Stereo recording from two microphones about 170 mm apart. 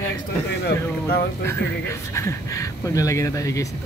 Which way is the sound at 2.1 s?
15° left (ahead or behind).